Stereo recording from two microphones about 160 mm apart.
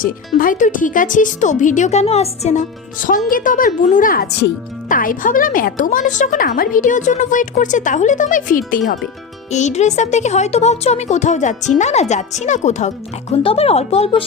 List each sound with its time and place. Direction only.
0.0 s speech: 60° left (ahead or behind)
9.5 s speech: 45° left (ahead or behind)